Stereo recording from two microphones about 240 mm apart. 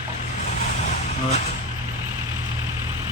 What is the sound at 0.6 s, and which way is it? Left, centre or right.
Vehicle, left.